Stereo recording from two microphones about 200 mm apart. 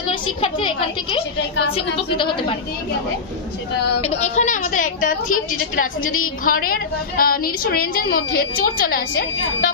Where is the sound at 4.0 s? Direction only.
30° left (ahead or behind).